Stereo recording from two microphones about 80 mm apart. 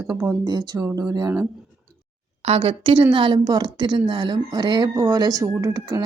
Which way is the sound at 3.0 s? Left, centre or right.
Right.